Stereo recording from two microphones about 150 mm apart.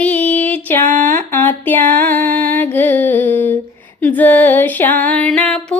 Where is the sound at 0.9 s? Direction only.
55° right (ahead or behind).